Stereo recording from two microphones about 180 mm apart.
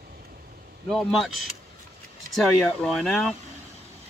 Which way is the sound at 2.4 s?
Centre (ahead or behind).